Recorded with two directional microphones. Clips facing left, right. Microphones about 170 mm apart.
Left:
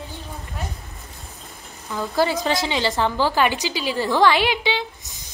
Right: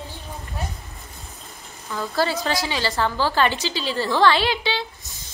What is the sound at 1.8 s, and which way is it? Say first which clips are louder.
A woman's voice: left 2 dB; 15° left (ahead or behind).